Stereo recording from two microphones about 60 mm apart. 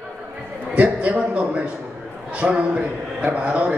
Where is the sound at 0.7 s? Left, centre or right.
Right.